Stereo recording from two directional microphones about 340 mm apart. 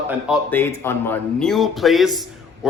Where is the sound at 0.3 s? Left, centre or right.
Centre.